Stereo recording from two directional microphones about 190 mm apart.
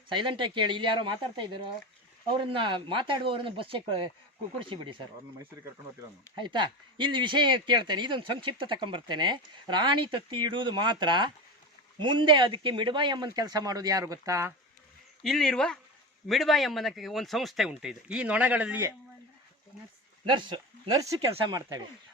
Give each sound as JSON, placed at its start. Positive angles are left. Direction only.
{"t": 0.1, "sound": "speech", "side_deg": -25}
{"t": 6.3, "sound": "speech", "side_deg": -25}
{"t": 15.2, "sound": "speech", "side_deg": 0}
{"t": 20.2, "sound": "speech", "side_deg": -25}